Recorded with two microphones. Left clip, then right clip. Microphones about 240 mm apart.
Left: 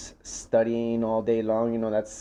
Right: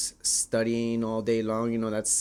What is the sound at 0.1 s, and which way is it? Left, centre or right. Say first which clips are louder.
Speech: left 7 dB; right.